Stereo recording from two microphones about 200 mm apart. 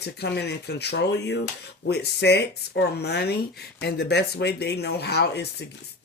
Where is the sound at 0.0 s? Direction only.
55° left (ahead or behind).